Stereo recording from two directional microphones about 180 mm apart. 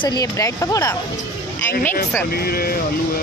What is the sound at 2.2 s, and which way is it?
Speech, 55° left (ahead or behind).